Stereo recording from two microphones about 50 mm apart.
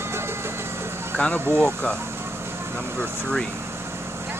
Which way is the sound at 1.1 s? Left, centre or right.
Left.